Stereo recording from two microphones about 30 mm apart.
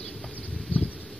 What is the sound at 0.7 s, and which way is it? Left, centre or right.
Bee, left.